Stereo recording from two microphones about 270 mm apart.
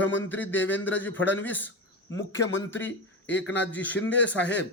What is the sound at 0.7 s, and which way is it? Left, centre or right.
A man's voice, centre.